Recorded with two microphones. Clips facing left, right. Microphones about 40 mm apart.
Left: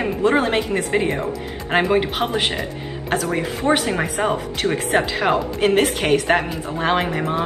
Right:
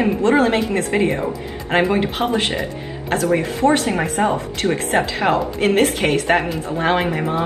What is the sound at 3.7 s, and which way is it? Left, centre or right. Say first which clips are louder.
Speech: left 1 dB; left.